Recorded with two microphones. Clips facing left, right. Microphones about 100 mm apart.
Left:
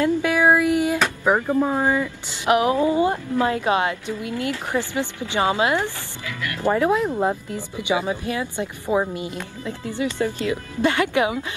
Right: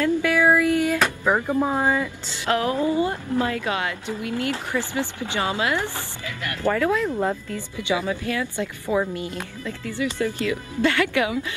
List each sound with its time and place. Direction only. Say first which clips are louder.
0.0 s a sound: left 1 dB; 20° left (ahead or behind)
1.2 s speech: left 2 dB; 15° left (ahead or behind)
1.6 s speech: left 1 dB; 10° right (ahead or behind)
2.2 s speech: left 6 dB; 20° left (ahead or behind)